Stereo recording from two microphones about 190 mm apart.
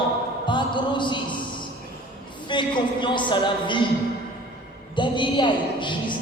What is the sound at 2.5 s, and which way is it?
A woman's voice, 25° left (ahead or behind).